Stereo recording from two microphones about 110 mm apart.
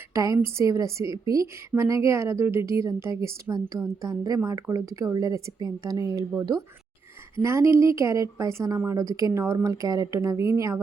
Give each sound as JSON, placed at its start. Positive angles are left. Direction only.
{"t": 0.1, "sound": "a woman's voice", "side_deg": -30}
{"t": 7.4, "sound": "a woman's voice", "side_deg": -25}